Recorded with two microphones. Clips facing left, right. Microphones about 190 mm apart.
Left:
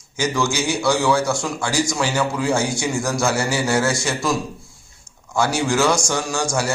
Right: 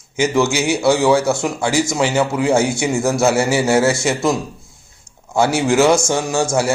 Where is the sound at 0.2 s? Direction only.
20° right (ahead or behind).